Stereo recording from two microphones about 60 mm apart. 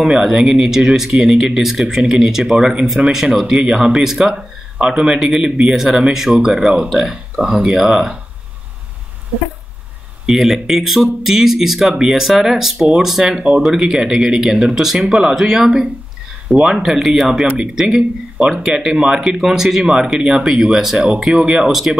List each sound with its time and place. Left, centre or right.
0.0 s speech: centre
10.2 s speech: centre